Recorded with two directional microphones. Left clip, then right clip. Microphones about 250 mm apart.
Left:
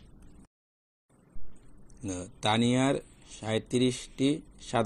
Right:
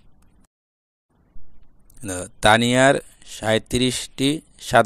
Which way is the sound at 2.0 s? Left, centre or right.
Right.